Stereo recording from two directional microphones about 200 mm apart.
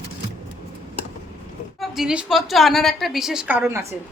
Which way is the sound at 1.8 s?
Centre (ahead or behind).